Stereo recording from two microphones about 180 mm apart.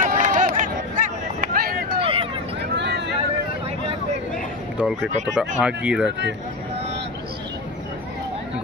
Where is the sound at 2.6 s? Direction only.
75° right (ahead or behind).